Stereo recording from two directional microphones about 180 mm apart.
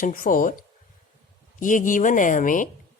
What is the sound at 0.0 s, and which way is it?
Speech, 50° left (ahead or behind).